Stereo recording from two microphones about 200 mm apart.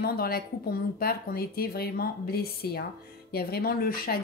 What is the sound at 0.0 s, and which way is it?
Speech, 50° left (ahead or behind).